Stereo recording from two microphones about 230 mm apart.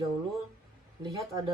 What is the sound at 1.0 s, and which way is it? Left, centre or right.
Speech, centre.